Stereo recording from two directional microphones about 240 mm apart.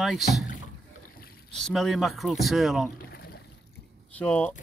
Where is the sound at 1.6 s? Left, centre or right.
Centre.